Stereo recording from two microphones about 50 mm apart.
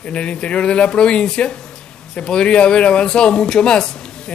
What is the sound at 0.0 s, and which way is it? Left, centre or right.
Speech, left.